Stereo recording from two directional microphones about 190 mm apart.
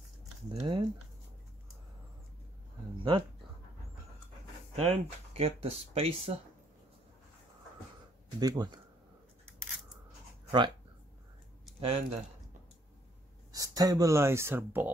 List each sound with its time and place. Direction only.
0.5 s speech: 25° right (ahead or behind)
3.0 s speech: 25° right (ahead or behind)
4.7 s speech: 30° right (ahead or behind)
8.4 s speech: 20° right (ahead or behind)
11.8 s speech: 30° right (ahead or behind)
13.5 s speech: 20° right (ahead or behind)